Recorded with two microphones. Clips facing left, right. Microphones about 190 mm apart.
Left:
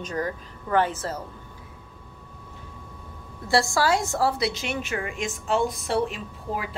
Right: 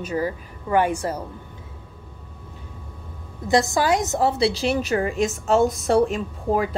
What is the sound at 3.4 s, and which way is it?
A woman's voice, 20° right (ahead or behind).